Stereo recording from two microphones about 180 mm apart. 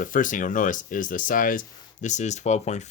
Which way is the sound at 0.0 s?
50° left (ahead or behind).